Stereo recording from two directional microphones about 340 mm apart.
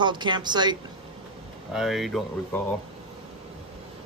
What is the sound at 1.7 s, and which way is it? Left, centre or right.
Speech, centre.